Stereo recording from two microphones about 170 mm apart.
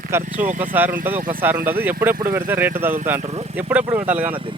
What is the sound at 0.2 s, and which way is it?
Speech, 50° right (ahead or behind).